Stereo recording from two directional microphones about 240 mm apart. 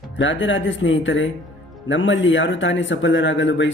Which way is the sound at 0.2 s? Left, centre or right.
Left.